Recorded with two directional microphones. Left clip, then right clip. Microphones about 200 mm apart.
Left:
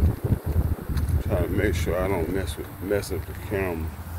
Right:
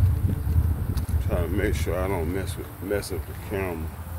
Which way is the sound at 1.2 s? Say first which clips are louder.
Left 2 dB; 25° left (ahead or behind).